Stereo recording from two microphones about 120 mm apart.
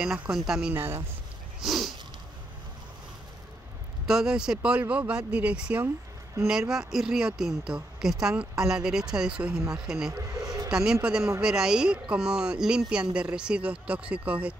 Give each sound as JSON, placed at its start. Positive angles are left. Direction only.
{"t": 0.0, "sound": "speech", "side_deg": -5}
{"t": 0.7, "sound": "speech", "side_deg": -20}
{"t": 1.6, "sound": "a sound", "side_deg": 0}
{"t": 4.0, "sound": "speech", "side_deg": -5}